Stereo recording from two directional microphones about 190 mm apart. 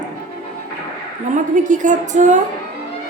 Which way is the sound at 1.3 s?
40° right (ahead or behind).